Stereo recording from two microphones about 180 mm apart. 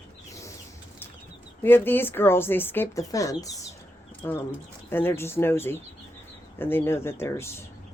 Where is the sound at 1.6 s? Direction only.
10° left (ahead or behind).